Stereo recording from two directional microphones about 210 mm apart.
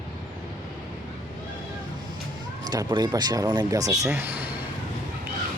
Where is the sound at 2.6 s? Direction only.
20° right (ahead or behind).